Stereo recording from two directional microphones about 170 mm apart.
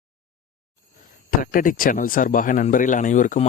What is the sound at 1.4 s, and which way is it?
A man's voice, 55° left (ahead or behind).